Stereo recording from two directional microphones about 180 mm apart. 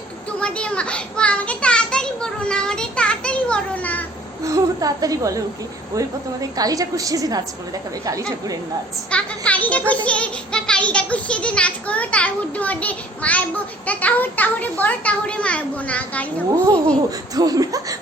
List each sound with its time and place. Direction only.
0.3 s a sound: 5° left (ahead or behind)
4.4 s a woman's voice: 20° right (ahead or behind)
9.0 s a child's voice: 5° left (ahead or behind)
17.3 s a woman's voice: 20° right (ahead or behind)